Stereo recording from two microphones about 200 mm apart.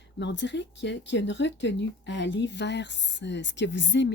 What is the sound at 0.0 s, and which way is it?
Speech, 60° left (ahead or behind).